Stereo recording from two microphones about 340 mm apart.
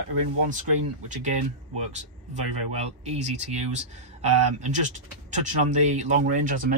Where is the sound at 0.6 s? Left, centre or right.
Right.